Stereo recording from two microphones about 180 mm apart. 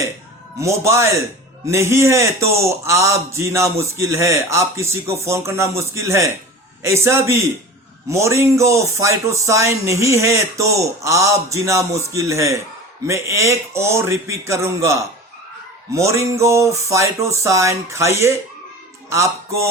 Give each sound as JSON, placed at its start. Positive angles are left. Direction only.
{"t": 0.6, "sound": "a man's voice", "side_deg": -15}